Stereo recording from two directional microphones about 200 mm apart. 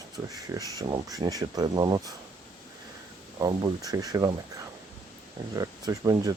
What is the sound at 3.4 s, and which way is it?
Speech, 20° right (ahead or behind).